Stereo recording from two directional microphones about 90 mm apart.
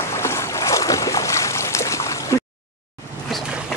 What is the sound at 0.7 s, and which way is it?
Boat, 40° left (ahead or behind).